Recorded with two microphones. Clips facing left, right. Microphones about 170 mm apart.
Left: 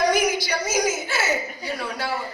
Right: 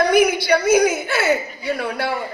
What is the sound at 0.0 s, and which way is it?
A woman's voice, 60° right (ahead or behind).